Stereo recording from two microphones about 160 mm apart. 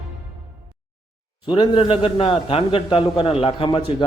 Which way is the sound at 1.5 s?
30° left (ahead or behind).